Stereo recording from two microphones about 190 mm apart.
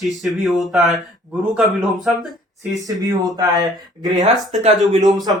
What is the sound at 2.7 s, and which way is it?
Speech, 20° right (ahead or behind).